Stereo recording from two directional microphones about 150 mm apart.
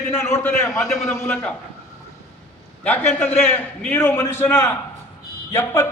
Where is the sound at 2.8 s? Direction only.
15° left (ahead or behind).